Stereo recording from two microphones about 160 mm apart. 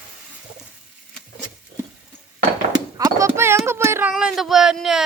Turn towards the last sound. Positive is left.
turn(degrees=-5)  # may be behind; listen again after turning